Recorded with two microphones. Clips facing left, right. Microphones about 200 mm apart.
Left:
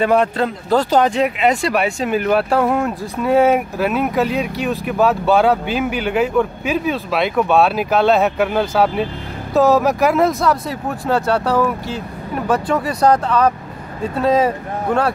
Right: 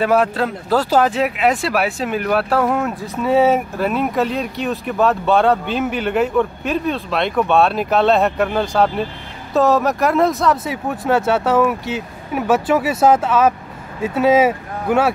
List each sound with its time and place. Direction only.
0.0 s speech: 5° right (ahead or behind)